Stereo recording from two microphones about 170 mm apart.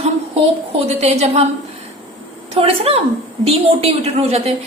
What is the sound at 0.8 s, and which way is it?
Speech, 40° right (ahead or behind).